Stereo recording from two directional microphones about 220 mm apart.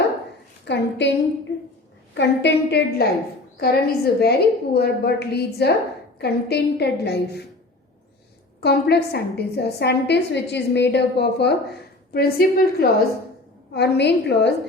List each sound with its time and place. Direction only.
0.6 s a woman's voice: 50° left (ahead or behind)
2.1 s a woman's voice: 50° left (ahead or behind)
8.6 s a woman's voice: 45° left (ahead or behind)